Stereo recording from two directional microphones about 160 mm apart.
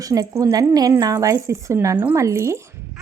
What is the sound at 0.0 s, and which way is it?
A woman's voice, 20° right (ahead or behind).